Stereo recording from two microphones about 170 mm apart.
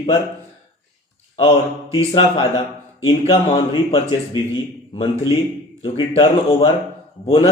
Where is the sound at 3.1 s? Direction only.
25° left (ahead or behind).